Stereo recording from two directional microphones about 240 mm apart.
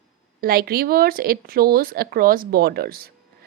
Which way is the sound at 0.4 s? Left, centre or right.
Right.